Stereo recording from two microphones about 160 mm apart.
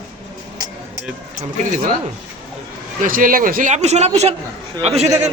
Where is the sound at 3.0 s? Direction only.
60° right (ahead or behind); by 5.1 s 40° right (ahead or behind).